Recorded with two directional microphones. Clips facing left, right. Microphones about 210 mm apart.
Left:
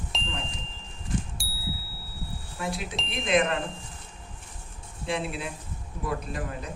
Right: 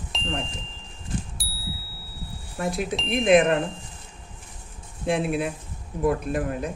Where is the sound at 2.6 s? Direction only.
50° right (ahead or behind).